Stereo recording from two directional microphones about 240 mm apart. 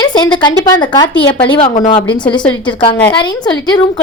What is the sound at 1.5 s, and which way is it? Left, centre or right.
A woman's voice, left.